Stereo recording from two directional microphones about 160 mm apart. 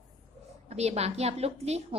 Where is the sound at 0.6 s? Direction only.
45° right (ahead or behind).